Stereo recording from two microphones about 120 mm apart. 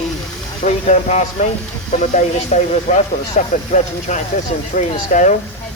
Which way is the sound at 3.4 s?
90° left.